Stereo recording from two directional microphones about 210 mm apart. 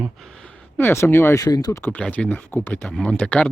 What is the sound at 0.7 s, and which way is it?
Speech, 10° left (ahead or behind).